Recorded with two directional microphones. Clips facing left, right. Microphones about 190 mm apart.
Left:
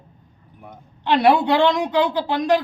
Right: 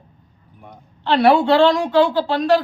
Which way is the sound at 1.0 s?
15° left (ahead or behind).